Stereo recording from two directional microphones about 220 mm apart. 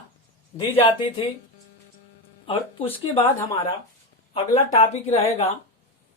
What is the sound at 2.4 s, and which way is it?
Speech, 25° left (ahead or behind).